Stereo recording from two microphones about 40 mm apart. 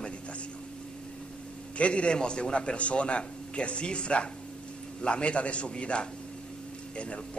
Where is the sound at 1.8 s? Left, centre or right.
Left.